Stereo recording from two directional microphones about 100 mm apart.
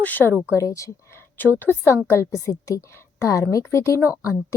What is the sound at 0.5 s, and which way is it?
Speech, 30° left (ahead or behind).